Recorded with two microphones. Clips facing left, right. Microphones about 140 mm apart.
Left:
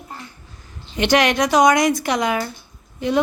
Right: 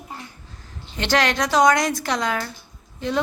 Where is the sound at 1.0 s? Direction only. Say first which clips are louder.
Left 4 dB; 15° left (ahead or behind).